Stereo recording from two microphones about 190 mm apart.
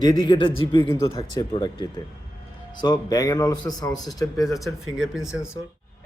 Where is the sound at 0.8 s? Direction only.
15° left (ahead or behind).